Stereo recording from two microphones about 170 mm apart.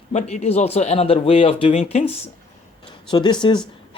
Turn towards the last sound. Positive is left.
turn(degrees=25)  # may be behind; listen again after turning